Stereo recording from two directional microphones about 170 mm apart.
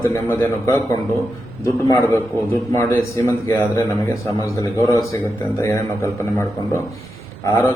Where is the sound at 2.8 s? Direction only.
15° left (ahead or behind).